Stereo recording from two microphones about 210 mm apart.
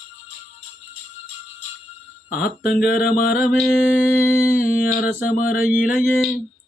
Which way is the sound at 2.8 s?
45° left (ahead or behind).